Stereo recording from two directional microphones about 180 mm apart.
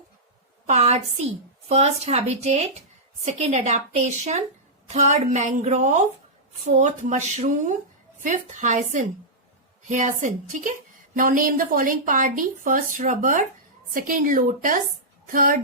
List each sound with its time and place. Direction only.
0.7 s a woman's voice: 35° right (ahead or behind)